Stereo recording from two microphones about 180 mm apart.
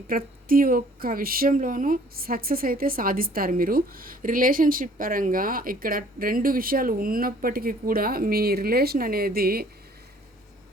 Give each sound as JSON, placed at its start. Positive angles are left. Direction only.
{"t": 0.1, "sound": "speech", "side_deg": -55}